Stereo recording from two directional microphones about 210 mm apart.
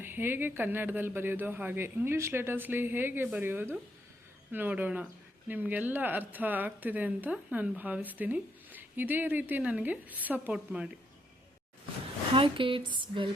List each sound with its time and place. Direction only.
0.0 s speech: 10° right (ahead or behind)
12.3 s speech: 25° right (ahead or behind)